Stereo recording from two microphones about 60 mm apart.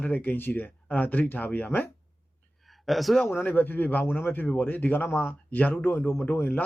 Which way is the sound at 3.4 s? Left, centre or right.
Left.